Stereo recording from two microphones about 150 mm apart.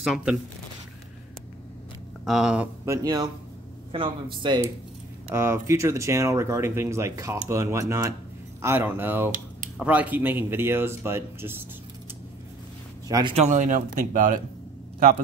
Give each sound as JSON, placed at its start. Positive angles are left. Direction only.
{"t": 0.0, "sound": "speech", "side_deg": -5}
{"t": 2.2, "sound": "speech", "side_deg": -5}
{"t": 2.9, "sound": "speech", "side_deg": -25}
{"t": 5.3, "sound": "speech", "side_deg": -15}
{"t": 13.3, "sound": "speech", "side_deg": -50}